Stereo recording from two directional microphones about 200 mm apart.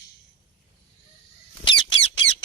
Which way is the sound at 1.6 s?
25° left (ahead or behind).